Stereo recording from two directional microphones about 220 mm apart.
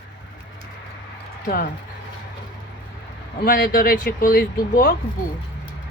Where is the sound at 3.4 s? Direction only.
45° left (ahead or behind).